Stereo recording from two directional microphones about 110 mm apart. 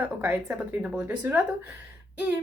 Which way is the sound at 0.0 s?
15° right (ahead or behind).